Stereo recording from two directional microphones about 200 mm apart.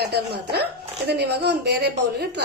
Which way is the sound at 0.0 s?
55° right (ahead or behind).